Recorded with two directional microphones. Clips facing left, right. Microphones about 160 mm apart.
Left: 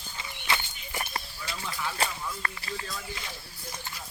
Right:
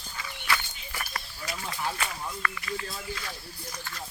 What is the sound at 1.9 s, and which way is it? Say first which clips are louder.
Speech: left 2 dB; 30° left (ahead or behind).